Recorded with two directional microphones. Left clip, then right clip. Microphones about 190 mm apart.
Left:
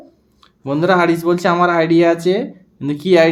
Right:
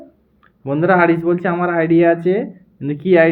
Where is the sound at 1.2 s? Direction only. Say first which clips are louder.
Left 4 dB; 25° left (ahead or behind).